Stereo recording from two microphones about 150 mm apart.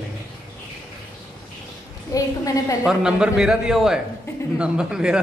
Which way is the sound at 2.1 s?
25° left (ahead or behind).